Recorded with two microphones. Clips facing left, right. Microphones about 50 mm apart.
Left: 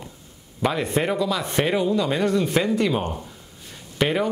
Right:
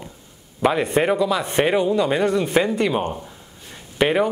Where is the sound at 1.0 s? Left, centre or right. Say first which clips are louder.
Right 4 dB; centre.